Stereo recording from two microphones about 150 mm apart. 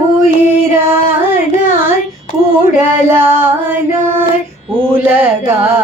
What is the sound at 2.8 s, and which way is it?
Carnatic music, 15° right (ahead or behind).